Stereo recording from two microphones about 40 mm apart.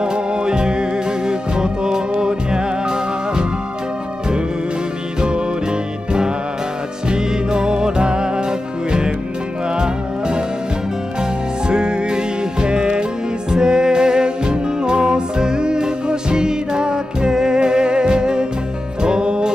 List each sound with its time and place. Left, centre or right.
0.0 s music: right
7.1 s music: right
9.8 s music: centre
11.7 s music: centre